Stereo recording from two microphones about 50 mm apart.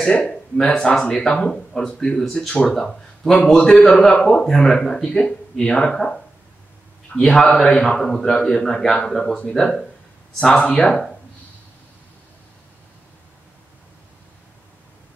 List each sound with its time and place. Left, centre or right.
0.0 s speech: left
0.3 s a man's voice: centre
7.2 s a man's voice: centre
10.4 s a man's voice: centre